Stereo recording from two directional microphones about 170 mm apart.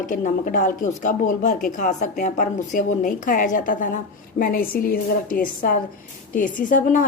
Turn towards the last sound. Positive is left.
turn(degrees=50)  # may be behind; listen again after turning